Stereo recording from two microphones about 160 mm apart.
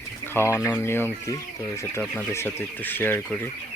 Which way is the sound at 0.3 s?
15° left (ahead or behind).